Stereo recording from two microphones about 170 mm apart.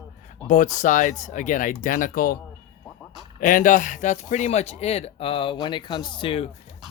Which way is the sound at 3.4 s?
55° left (ahead or behind).